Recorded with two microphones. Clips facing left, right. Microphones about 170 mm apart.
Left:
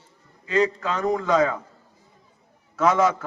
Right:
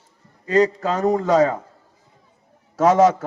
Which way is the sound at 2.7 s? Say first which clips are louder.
Right 5 dB; 40° right (ahead or behind).